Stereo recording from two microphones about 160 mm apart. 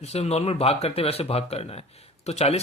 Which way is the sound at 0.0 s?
40° left (ahead or behind).